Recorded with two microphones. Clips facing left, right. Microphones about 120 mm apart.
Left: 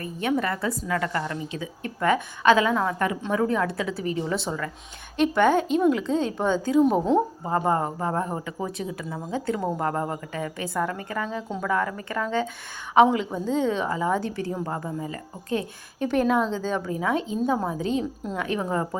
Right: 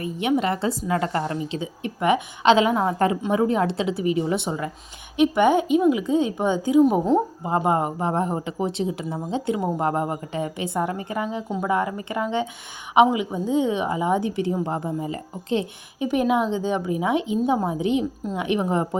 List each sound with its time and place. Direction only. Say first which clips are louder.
0.0 s a woman's voice: right 3 dB; 20° right (ahead or behind)
6.8 s speech: right 2 dB; 5° right (ahead or behind)
7.4 s a woman's voice: right 2 dB; 15° right (ahead or behind)